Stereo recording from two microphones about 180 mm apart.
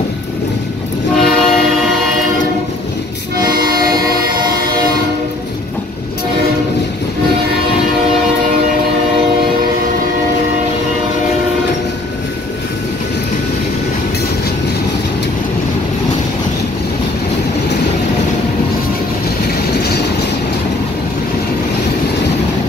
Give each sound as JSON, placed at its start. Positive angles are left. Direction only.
{"t": 1.1, "sound": "train", "side_deg": 0}
{"t": 3.4, "sound": "vehicle", "side_deg": -55}